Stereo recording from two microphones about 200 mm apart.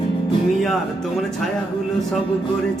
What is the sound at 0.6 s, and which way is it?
Music, centre (ahead or behind).